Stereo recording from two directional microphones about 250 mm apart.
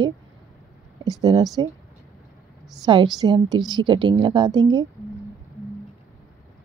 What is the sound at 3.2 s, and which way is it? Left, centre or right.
Speech, centre.